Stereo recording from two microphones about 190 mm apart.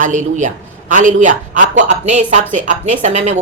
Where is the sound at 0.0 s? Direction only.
40° right (ahead or behind).